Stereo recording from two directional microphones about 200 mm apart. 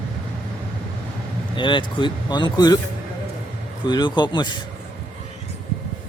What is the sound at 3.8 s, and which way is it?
Speech, 20° left (ahead or behind).